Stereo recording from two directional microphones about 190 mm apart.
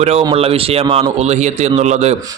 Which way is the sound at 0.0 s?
35° right (ahead or behind).